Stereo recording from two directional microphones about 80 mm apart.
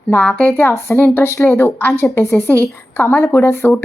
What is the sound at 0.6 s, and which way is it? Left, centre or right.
A woman's voice, left.